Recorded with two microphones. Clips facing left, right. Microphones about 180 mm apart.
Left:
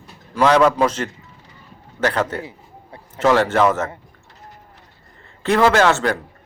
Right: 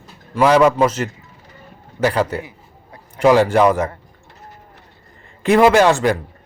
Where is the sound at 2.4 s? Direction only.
30° left (ahead or behind).